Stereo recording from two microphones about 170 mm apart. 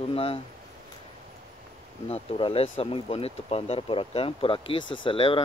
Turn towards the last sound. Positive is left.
turn(degrees=30)  # may be behind; listen again after turning